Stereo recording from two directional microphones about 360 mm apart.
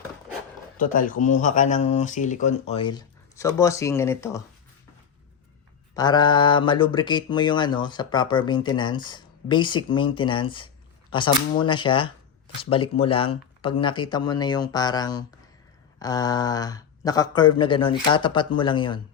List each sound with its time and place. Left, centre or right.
0.8 s speech: left
6.0 s speech: centre